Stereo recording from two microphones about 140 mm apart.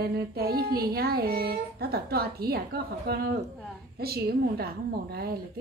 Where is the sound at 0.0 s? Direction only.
90° right.